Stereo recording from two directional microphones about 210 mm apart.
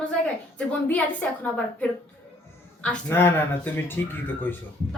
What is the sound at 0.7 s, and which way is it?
Speech, 5° left (ahead or behind).